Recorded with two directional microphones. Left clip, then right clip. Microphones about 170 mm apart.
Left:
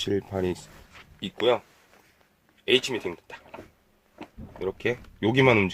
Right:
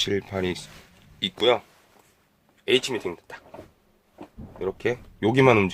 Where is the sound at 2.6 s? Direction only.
10° left (ahead or behind).